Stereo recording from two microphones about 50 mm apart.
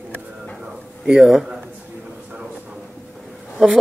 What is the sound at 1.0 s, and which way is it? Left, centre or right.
Speech, centre.